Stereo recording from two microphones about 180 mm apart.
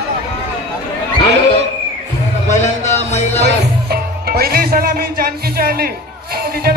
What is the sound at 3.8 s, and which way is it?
Music, 60° right (ahead or behind).